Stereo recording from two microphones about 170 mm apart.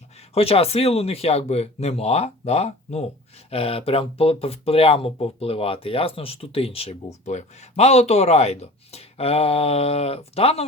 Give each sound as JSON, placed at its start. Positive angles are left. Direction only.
{"t": 0.3, "sound": "speech", "side_deg": 35}